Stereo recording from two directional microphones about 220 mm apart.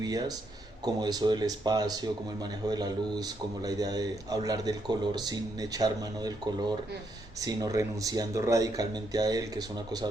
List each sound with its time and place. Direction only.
0.0 s speech: 15° right (ahead or behind)